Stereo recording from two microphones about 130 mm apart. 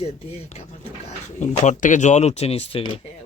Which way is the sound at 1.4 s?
65° left (ahead or behind).